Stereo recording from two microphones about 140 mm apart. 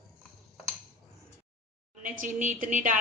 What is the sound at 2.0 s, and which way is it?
Speech, 70° right (ahead or behind).